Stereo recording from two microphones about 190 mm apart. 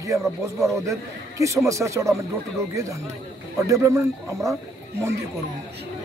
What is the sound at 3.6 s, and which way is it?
Speech, 15° right (ahead or behind).